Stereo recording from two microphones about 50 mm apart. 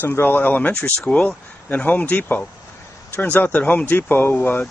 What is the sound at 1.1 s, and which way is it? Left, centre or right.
Speech, left.